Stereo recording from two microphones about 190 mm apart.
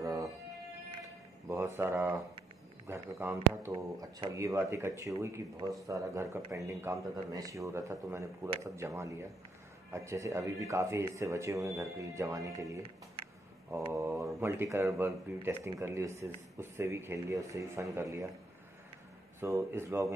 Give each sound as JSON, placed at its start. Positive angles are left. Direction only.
{"t": 0.0, "sound": "music", "side_deg": -15}
{"t": 1.8, "sound": "a man's voice", "side_deg": -10}
{"t": 19.4, "sound": "a man's voice", "side_deg": -15}